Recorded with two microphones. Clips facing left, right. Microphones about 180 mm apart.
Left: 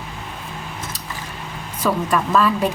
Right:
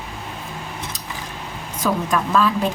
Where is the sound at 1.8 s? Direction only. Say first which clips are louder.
Left 1 dB; centre (ahead or behind).